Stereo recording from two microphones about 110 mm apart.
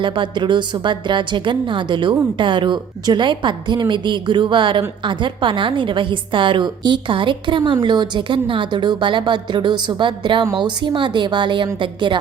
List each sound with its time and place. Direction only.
0.0 s a woman's voice: 50° right (ahead or behind)